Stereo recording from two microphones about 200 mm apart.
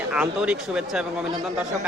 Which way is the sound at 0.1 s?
5° right (ahead or behind).